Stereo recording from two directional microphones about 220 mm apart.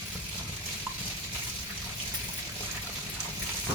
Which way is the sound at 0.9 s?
5° right (ahead or behind).